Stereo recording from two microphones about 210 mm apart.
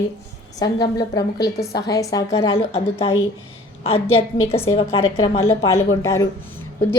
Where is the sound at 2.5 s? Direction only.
25° left (ahead or behind).